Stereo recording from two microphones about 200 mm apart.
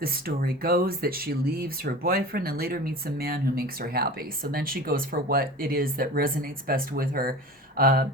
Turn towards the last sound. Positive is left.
turn(degrees=-45)  # may be behind; listen again after turning